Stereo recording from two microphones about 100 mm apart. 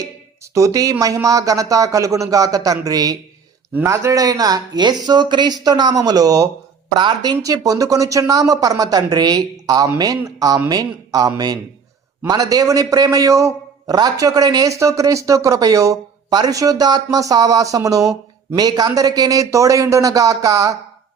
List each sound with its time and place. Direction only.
0.5 s a man's voice: 35° right (ahead or behind)